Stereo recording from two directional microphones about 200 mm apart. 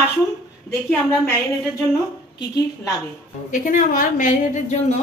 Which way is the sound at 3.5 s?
40° left (ahead or behind).